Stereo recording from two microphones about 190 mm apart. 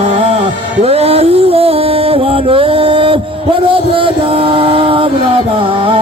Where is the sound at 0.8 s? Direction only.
30° right (ahead or behind).